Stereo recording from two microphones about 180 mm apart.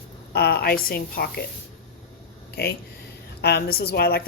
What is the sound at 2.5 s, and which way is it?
Speech, 65° left (ahead or behind).